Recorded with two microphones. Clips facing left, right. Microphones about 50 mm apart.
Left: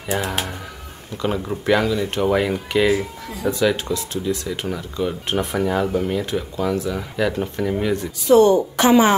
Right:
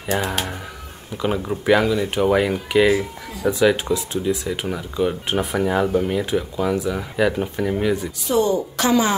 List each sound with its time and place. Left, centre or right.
1.1 s speech: centre
8.3 s a woman's voice: left